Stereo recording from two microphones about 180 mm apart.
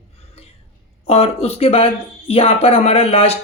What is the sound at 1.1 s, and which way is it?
Speech, 35° left (ahead or behind).